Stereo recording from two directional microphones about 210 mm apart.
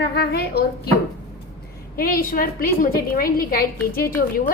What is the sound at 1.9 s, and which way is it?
A woman's voice, 45° left (ahead or behind).